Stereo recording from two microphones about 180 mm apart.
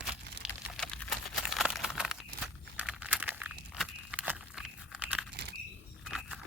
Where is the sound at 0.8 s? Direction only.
Centre (ahead or behind).